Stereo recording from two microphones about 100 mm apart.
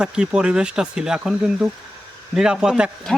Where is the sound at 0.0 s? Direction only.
10° right (ahead or behind).